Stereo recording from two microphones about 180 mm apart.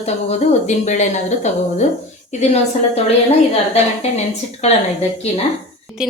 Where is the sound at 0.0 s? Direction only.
35° left (ahead or behind).